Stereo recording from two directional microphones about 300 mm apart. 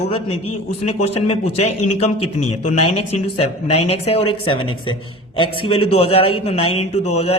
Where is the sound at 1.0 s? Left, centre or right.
Left.